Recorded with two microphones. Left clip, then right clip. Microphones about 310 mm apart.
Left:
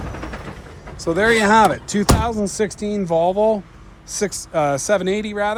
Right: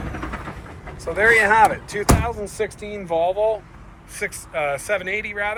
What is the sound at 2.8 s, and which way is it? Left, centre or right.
Speech, left.